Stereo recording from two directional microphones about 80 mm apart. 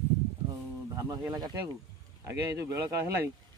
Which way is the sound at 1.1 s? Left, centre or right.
Right.